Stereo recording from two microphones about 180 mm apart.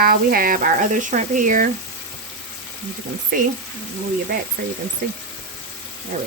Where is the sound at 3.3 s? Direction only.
55° right (ahead or behind).